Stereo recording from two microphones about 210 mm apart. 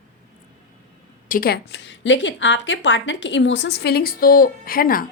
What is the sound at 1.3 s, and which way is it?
A woman's voice, 45° left (ahead or behind).